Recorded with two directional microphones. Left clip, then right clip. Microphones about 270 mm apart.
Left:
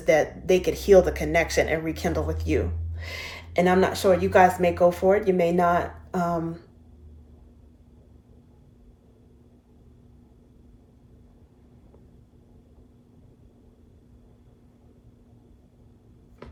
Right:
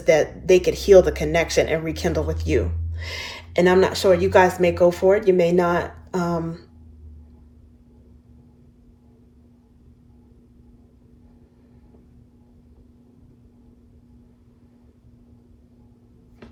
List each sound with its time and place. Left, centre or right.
0.0 s speech: right